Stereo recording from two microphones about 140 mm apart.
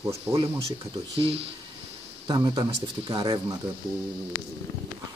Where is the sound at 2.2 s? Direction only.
30° right (ahead or behind).